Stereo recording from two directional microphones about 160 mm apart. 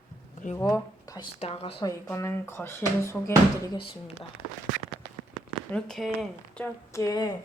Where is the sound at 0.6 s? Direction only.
25° left (ahead or behind).